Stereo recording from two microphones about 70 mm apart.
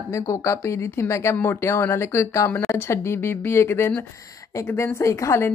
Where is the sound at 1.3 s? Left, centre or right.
Left.